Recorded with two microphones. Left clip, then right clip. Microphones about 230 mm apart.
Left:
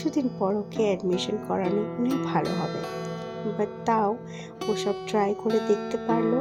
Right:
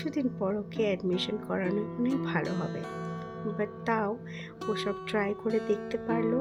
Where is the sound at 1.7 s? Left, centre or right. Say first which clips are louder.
Left 4 dB; left.